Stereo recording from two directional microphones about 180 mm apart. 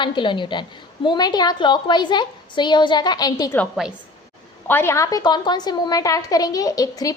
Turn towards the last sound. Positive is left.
turn(degrees=20)  # may be behind; listen again after turning